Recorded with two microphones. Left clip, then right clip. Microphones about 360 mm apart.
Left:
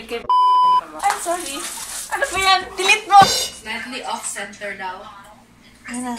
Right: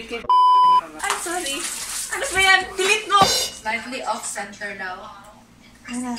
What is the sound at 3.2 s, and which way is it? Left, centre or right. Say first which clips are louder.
Dishes: left 7 dB; centre.